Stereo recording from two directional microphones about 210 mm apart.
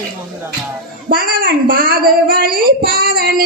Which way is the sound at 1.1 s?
45° right (ahead or behind).